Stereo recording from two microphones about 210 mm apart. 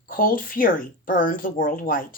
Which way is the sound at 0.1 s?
40° left (ahead or behind).